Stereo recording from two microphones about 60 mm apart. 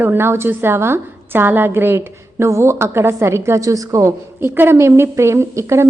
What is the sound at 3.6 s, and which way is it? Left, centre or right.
Speech, right.